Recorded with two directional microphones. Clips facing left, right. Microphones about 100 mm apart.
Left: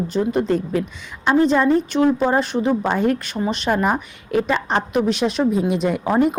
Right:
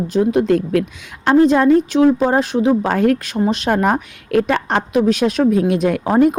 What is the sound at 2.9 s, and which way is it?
Speech, 90° right.